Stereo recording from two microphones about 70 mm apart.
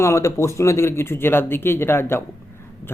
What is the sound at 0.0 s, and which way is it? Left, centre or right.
Speech, left.